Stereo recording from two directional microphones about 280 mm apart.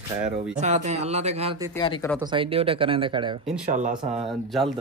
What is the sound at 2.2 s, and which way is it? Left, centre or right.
Speech, centre.